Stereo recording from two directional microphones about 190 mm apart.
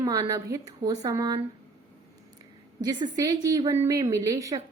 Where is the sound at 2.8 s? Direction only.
20° right (ahead or behind).